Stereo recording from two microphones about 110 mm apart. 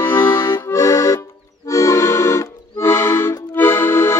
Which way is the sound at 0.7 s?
30° left (ahead or behind).